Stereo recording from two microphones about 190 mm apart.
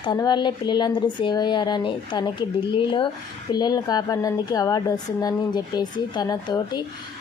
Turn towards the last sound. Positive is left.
turn(degrees=20)  # may be behind; listen again after turning